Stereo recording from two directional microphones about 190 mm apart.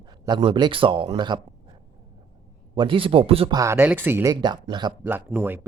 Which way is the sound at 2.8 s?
30° right (ahead or behind).